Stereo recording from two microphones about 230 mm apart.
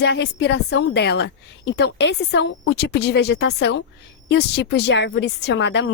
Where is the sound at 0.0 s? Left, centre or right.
Left.